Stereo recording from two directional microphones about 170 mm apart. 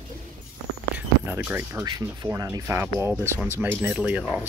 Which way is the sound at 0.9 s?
10° right (ahead or behind).